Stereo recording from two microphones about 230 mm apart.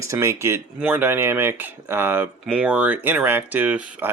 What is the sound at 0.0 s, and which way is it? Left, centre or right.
Speech, centre.